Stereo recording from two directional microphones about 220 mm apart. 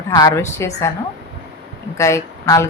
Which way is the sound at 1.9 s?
15° left (ahead or behind).